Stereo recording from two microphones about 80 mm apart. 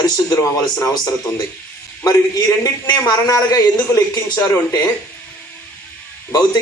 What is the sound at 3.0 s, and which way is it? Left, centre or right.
A man's voice, left.